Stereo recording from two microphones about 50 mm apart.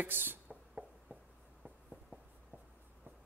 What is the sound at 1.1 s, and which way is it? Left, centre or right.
Writing, right.